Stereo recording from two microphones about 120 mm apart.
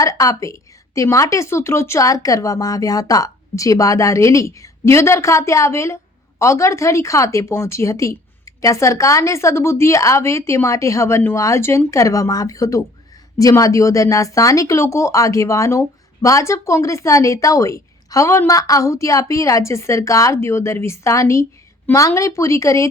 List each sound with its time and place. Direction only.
0.0 s speech: 30° left (ahead or behind)